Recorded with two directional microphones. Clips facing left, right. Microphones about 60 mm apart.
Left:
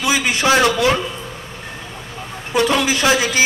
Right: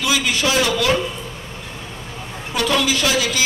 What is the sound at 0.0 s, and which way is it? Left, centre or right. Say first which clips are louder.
Speech: left 2 dB; left.